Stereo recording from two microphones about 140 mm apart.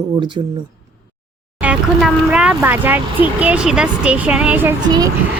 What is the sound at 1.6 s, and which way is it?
Speech, 10° right (ahead or behind).